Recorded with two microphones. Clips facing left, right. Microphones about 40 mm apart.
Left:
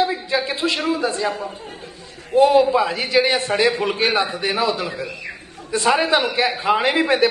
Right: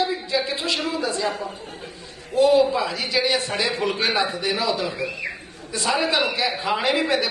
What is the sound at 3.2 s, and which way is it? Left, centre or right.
Speech, left.